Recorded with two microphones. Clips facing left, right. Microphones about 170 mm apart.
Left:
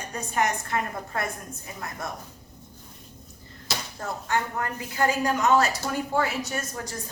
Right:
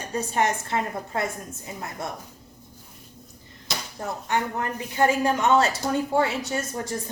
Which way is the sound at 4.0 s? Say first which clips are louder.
Right 2 dB; 20° right (ahead or behind).